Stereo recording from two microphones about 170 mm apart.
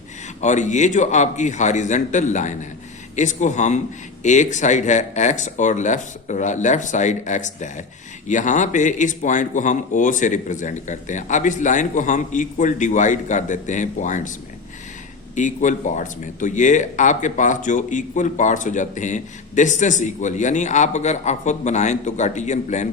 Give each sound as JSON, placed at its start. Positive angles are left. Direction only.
{"t": 0.4, "sound": "speech", "side_deg": 45}
{"t": 15.4, "sound": "speech", "side_deg": 45}